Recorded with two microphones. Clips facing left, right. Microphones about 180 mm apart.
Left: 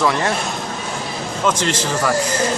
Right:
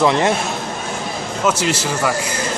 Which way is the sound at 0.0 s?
20° right (ahead or behind).